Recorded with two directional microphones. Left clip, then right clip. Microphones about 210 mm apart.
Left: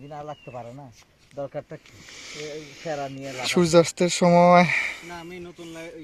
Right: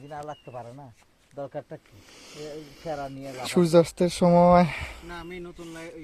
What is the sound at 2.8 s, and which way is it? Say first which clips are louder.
Speech: left 3 dB; 50° left (ahead or behind).